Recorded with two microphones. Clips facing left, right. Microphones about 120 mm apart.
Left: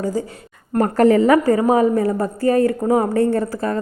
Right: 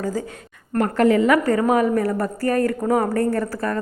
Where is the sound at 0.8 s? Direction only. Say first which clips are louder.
Left 3 dB; 40° left (ahead or behind).